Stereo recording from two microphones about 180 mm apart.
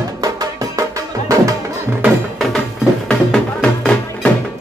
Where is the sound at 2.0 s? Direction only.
Centre (ahead or behind).